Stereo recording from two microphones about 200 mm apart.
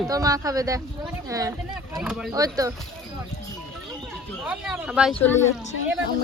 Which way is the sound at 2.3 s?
15° right (ahead or behind).